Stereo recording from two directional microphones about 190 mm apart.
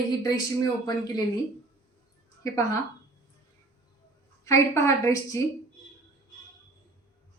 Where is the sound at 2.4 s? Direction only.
15° left (ahead or behind).